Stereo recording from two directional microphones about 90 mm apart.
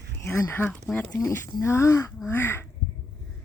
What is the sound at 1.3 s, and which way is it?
Speech, 30° left (ahead or behind).